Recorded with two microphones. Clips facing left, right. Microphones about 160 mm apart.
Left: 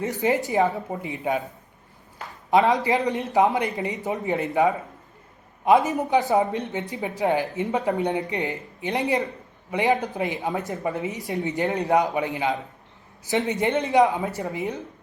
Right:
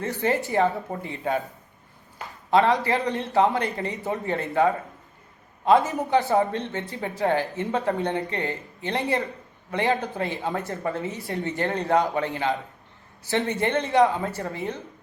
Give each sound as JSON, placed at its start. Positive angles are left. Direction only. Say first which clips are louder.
{"t": 0.0, "sound": "speech", "louder": "left 2 dB", "side_deg": 15}
{"t": 2.5, "sound": "speech", "louder": "left 1 dB", "side_deg": 15}